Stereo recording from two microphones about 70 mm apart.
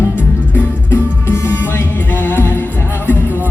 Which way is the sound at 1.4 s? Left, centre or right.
Left.